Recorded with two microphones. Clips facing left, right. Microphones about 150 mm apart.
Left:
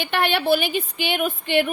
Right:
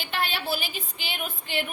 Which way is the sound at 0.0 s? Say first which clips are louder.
Left 8 dB; 65° left (ahead or behind).